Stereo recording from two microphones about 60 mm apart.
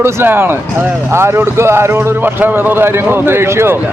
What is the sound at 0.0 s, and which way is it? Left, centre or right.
A man's voice, right.